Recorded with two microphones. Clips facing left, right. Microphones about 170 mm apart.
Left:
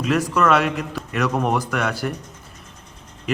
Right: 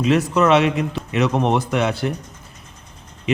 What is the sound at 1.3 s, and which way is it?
Speech, 25° right (ahead or behind).